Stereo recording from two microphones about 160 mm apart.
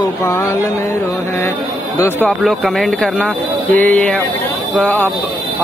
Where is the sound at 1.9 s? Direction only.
15° left (ahead or behind).